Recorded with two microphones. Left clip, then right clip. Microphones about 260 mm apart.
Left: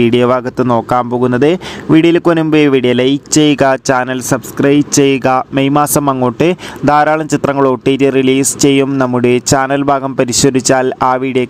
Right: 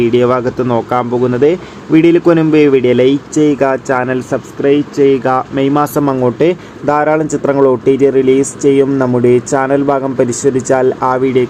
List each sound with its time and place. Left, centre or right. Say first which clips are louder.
0.0 s speech: even; left
3.6 s speech: left 2 dB; left